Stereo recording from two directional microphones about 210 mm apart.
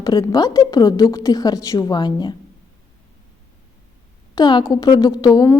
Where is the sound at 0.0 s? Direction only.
15° left (ahead or behind).